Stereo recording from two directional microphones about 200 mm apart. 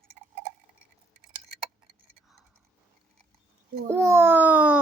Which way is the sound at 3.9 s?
15° right (ahead or behind).